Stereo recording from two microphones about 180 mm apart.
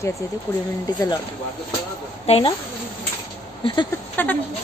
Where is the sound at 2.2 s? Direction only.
35° left (ahead or behind).